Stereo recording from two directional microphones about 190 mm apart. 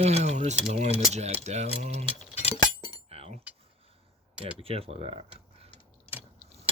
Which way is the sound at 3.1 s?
35° right (ahead or behind).